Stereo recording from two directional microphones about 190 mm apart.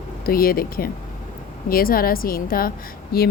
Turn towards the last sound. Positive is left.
turn(degrees=50)  # may be behind; listen again after turning